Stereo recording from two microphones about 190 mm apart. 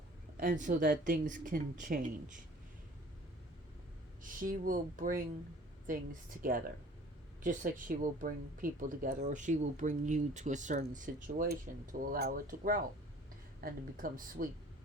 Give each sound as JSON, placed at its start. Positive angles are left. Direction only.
{"t": 0.3, "sound": "speech", "side_deg": -45}
{"t": 4.2, "sound": "speech", "side_deg": -45}
{"t": 7.4, "sound": "speech", "side_deg": -45}